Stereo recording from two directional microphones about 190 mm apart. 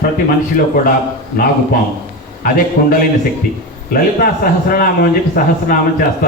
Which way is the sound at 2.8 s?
55° left (ahead or behind).